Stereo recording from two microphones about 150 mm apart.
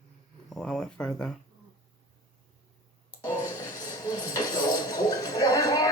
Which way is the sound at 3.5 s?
20° left (ahead or behind).